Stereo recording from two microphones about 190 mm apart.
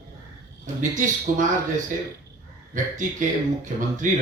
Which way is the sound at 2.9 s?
40° right (ahead or behind).